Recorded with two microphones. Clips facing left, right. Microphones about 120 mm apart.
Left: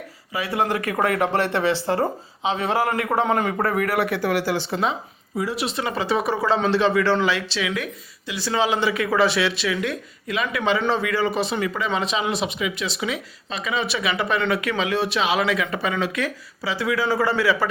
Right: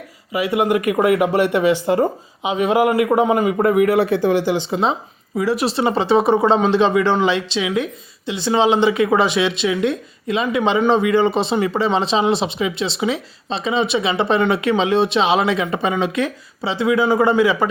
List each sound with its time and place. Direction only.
0.3 s speech: 20° right (ahead or behind)
3.6 s speech: 20° right (ahead or behind)
5.5 s speech: 35° right (ahead or behind)